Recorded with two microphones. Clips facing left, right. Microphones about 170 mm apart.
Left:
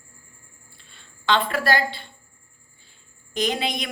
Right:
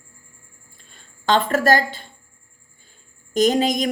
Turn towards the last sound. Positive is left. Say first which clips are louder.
# right 8 dB
turn(degrees=-40)  # may be behind; listen again after turning